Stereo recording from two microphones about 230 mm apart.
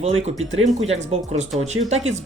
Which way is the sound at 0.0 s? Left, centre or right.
Right.